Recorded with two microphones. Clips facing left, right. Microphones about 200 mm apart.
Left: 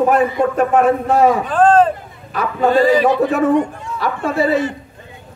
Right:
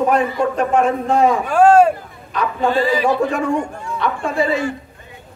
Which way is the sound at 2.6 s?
45° left (ahead or behind).